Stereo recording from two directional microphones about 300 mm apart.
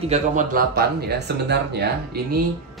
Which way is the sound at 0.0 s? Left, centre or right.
Right.